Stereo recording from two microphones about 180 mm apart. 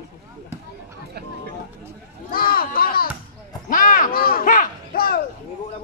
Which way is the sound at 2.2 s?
55° left (ahead or behind).